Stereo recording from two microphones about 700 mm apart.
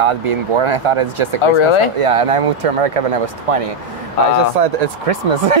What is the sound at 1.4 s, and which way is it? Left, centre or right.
Speech, left.